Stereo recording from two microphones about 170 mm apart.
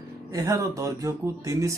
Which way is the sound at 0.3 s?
20° right (ahead or behind).